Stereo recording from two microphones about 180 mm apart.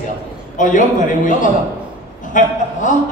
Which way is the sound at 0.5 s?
45° left (ahead or behind).